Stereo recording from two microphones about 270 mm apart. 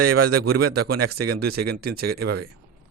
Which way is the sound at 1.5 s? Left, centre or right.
Right.